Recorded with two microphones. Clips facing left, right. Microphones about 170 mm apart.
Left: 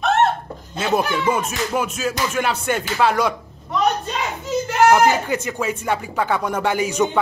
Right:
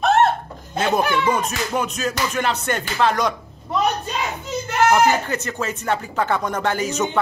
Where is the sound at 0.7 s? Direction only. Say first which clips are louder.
Right 1 dB; 5° left (ahead or behind).